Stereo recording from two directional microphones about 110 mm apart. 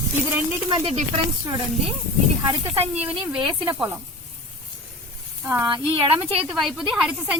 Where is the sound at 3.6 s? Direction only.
45° right (ahead or behind).